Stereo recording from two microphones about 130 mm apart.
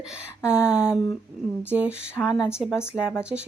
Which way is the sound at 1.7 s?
10° right (ahead or behind).